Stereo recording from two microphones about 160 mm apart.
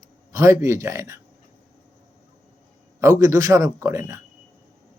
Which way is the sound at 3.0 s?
20° right (ahead or behind).